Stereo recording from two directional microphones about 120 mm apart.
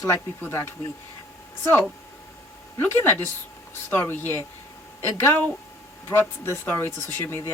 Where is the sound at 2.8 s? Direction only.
20° left (ahead or behind).